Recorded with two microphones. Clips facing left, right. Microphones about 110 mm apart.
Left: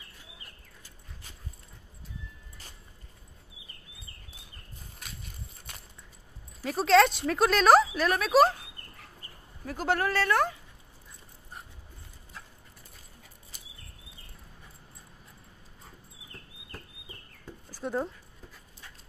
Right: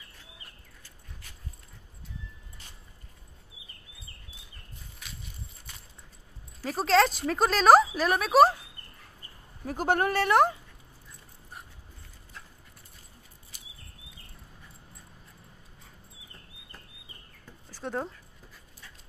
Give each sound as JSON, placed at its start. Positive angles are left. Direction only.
{"t": 6.6, "sound": "speech", "side_deg": 0}
{"t": 9.7, "sound": "speech", "side_deg": -45}
{"t": 9.9, "sound": "speech", "side_deg": -20}
{"t": 17.7, "sound": "a sound", "side_deg": 0}